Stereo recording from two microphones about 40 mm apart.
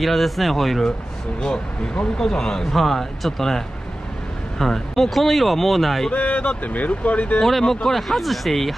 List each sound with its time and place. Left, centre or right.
0.0 s speech: centre
1.4 s speech: centre
6.1 s speech: left
7.6 s speech: centre